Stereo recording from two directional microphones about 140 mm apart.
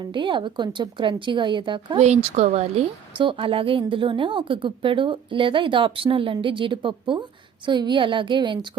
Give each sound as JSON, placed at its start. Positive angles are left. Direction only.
{"t": 0.0, "sound": "a woman's voice", "side_deg": -35}
{"t": 2.0, "sound": "speech", "side_deg": -50}
{"t": 3.2, "sound": "a woman's voice", "side_deg": -40}